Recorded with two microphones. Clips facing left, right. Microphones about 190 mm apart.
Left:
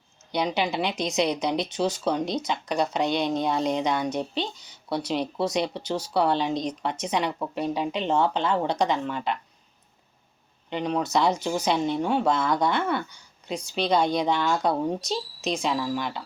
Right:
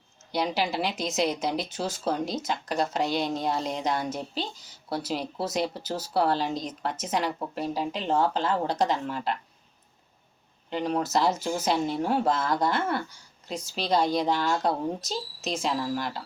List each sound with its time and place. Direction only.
0.3 s speech: 5° right (ahead or behind)
10.7 s speech: centre (ahead or behind)